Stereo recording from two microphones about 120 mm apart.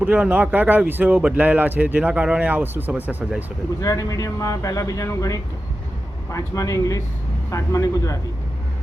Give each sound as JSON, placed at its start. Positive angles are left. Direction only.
{"t": 0.0, "sound": "speech", "side_deg": -15}
{"t": 3.8, "sound": "speech", "side_deg": 30}